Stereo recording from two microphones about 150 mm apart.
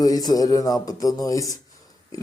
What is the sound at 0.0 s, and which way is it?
Speech, 25° left (ahead or behind).